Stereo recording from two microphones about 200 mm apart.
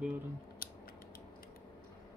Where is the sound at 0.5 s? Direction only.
45° left (ahead or behind).